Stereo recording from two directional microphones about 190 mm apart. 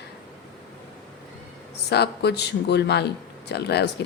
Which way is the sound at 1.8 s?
60° left (ahead or behind).